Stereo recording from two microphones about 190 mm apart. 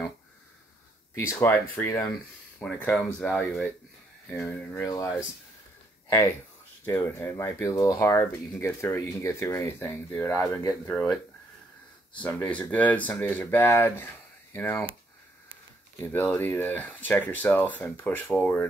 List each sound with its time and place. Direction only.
1.2 s speech: 15° left (ahead or behind)
2.6 s speech: 5° left (ahead or behind)
6.9 s speech: 15° left (ahead or behind)
10.7 s speech: centre (ahead or behind)
12.2 s speech: 10° left (ahead or behind)
16.1 s speech: 10° left (ahead or behind)